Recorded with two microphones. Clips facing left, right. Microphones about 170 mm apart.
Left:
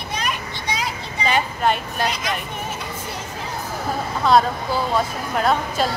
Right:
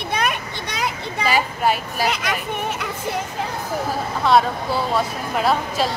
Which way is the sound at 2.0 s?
60° right (ahead or behind).